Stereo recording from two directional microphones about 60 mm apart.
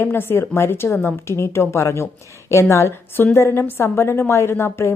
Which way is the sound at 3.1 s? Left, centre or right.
Left.